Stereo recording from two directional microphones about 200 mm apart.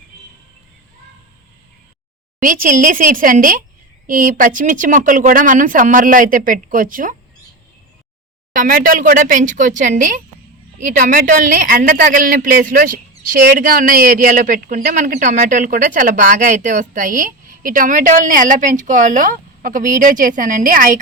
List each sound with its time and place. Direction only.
2.4 s a woman's voice: 40° right (ahead or behind)
8.5 s a woman's voice: 40° right (ahead or behind)